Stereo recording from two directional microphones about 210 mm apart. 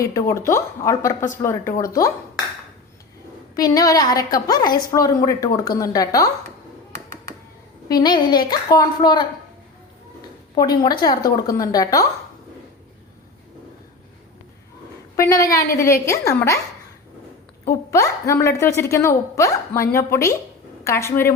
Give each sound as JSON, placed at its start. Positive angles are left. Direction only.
{"t": 0.0, "sound": "a woman's voice", "side_deg": 15}
{"t": 3.5, "sound": "a woman's voice", "side_deg": 15}
{"t": 7.9, "sound": "a woman's voice", "side_deg": 20}
{"t": 15.1, "sound": "a woman's voice", "side_deg": 15}
{"t": 17.7, "sound": "a woman's voice", "side_deg": 15}